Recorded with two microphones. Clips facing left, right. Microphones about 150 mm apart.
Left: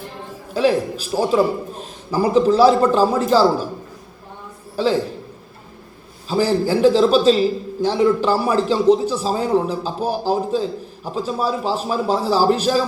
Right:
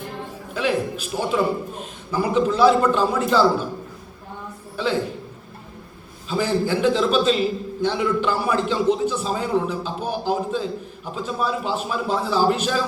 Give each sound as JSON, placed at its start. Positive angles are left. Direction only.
{"t": 0.5, "sound": "a man's voice", "side_deg": 35}
{"t": 4.8, "sound": "a man's voice", "side_deg": 35}
{"t": 6.2, "sound": "a man's voice", "side_deg": 35}